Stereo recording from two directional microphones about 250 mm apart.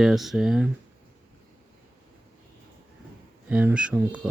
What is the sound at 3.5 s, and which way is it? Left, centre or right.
Speech, centre.